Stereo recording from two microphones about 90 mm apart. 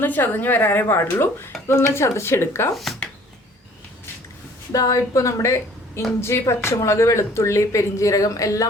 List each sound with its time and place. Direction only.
0.0 s speech: 20° left (ahead or behind)
2.7 s speech: centre (ahead or behind)
4.7 s speech: 40° left (ahead or behind)